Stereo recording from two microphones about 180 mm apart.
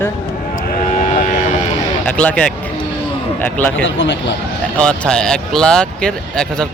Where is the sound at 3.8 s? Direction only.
90° left.